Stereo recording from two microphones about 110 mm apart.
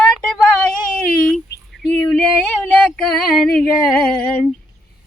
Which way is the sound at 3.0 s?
5° left (ahead or behind).